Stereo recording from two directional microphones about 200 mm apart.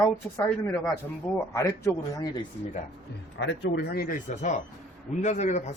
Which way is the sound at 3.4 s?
60° left (ahead or behind).